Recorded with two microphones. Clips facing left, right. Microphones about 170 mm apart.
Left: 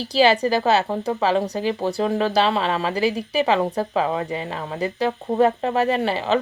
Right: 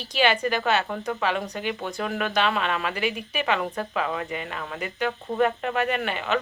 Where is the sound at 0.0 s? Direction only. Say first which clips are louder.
Left 6 dB; 35° left (ahead or behind).